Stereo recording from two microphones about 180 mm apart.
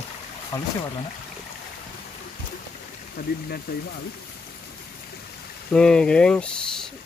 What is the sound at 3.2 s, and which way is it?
Speech, 55° left (ahead or behind).